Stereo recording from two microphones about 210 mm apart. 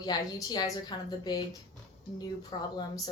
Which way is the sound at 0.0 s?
20° left (ahead or behind).